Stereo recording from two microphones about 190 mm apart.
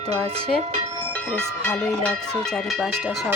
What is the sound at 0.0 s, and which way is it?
Speech, 30° right (ahead or behind).